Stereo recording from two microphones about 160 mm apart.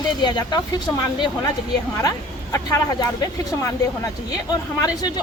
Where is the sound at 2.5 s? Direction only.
20° left (ahead or behind).